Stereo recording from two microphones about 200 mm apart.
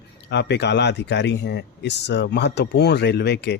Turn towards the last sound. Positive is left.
turn(degrees=55)  # may be behind; listen again after turning